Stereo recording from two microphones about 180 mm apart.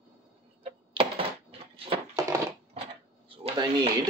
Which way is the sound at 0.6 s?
30° right (ahead or behind).